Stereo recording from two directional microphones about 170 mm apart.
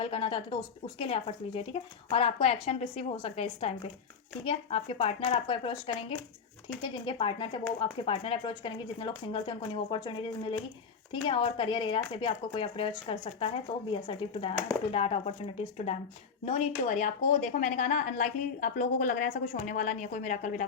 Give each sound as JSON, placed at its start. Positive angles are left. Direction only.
{"t": 0.0, "sound": "a woman's voice", "side_deg": 30}